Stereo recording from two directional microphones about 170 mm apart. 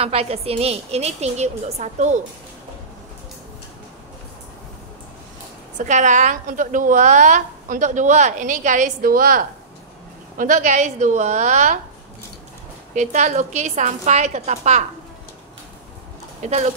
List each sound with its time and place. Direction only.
0.0 s a woman's voice: 35° right (ahead or behind)
5.8 s a woman's voice: 45° right (ahead or behind)
12.9 s a woman's voice: 45° right (ahead or behind)
16.3 s speech: 40° right (ahead or behind)